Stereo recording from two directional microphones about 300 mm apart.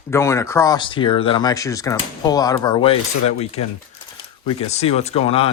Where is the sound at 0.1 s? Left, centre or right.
Centre.